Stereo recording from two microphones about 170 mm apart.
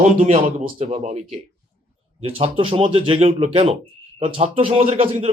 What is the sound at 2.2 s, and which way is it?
A man's voice, 35° right (ahead or behind).